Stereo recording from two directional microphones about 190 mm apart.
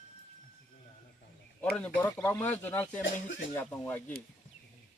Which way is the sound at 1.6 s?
10° left (ahead or behind).